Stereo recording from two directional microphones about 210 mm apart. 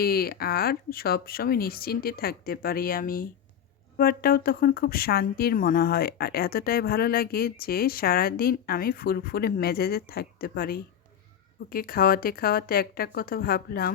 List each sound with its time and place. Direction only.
0.0 s speech: 45° left (ahead or behind)